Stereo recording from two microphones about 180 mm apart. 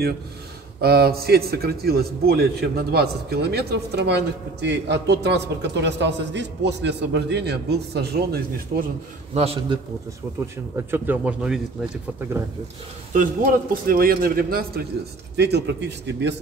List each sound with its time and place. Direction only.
0.7 s a man's voice: 60° right (ahead or behind)
9.3 s a man's voice: 35° right (ahead or behind)
10.9 s speech: 10° right (ahead or behind)
13.1 s a man's voice: 50° right (ahead or behind)
15.3 s speech: 70° right (ahead or behind)